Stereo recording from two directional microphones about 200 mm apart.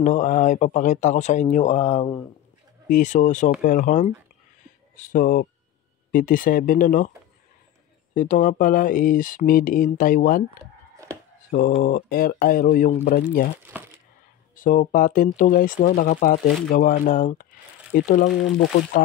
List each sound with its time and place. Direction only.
0.0 s speech: 40° left (ahead or behind)
8.1 s speech: 40° left (ahead or behind)
11.5 s speech: 45° left (ahead or behind)
13.6 s speech: 10° right (ahead or behind)
14.5 s speech: 40° left (ahead or behind)